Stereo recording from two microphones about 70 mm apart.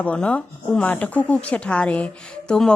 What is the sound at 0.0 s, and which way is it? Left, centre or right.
A woman's voice, centre.